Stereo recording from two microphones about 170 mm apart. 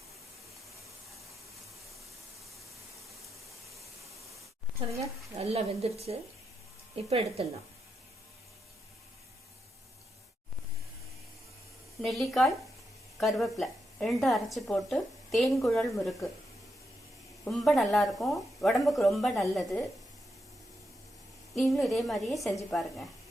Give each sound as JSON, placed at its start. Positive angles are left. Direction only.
{"t": 5.4, "sound": "speech", "side_deg": -35}
{"t": 12.0, "sound": "a woman's voice", "side_deg": 0}
{"t": 17.4, "sound": "speech", "side_deg": 0}
{"t": 21.5, "sound": "speech", "side_deg": 0}